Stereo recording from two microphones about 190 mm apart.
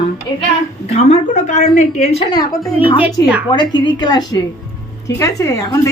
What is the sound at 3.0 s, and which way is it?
Speech, 10° right (ahead or behind).